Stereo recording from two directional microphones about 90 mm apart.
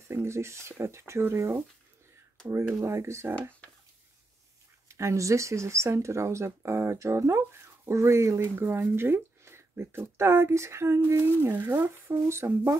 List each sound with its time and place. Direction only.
0.1 s speech: 30° right (ahead or behind)
4.8 s speech: 35° right (ahead or behind)